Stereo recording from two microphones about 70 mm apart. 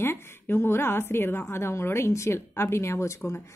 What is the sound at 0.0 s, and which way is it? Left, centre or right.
A woman's voice, left.